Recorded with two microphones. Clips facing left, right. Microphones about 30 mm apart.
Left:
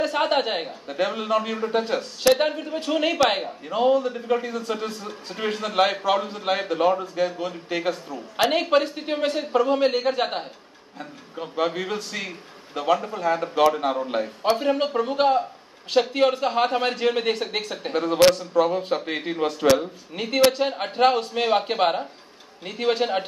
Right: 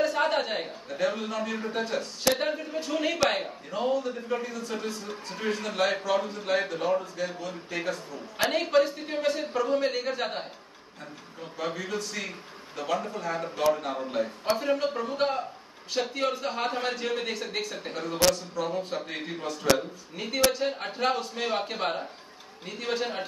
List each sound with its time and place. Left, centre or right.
0.0 s a sound: left
0.6 s speech: left
13.6 s speech: left